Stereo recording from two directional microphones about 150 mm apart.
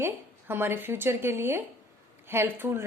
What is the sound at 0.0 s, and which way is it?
A woman's voice, 15° right (ahead or behind).